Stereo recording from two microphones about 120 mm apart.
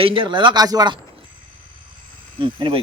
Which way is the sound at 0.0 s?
45° right (ahead or behind).